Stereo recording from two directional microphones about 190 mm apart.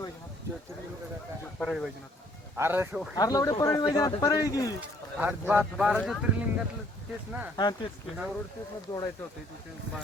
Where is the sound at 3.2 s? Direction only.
20° left (ahead or behind).